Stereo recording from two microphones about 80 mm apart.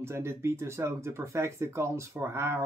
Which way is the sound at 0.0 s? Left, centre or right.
Right.